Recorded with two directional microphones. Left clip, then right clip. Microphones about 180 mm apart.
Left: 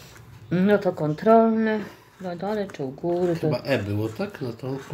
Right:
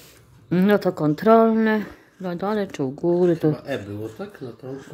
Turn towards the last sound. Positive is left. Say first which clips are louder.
# left 4 dB
turn(degrees=45)  # may be behind; listen again after turning